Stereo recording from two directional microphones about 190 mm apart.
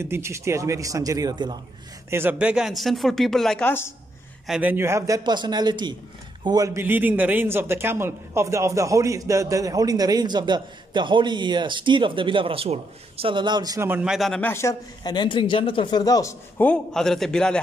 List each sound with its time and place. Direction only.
0.0 s a man's voice: 15° right (ahead or behind)
2.0 s a man's voice: 10° right (ahead or behind); by 3.9 s 10° left (ahead or behind)
4.5 s a man's voice: 10° right (ahead or behind)